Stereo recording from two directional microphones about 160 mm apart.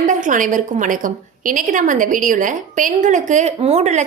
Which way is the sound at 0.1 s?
55° right (ahead or behind).